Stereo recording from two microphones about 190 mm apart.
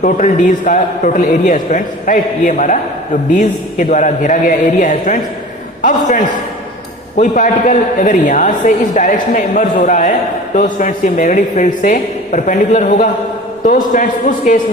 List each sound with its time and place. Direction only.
0.0 s a woman's voice: 40° left (ahead or behind)